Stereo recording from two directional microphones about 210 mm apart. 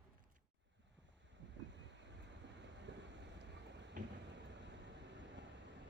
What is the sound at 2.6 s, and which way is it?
Vehicle, 55° right (ahead or behind).